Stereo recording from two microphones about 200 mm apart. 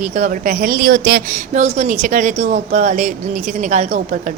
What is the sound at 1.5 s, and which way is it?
A woman's voice, 35° right (ahead or behind).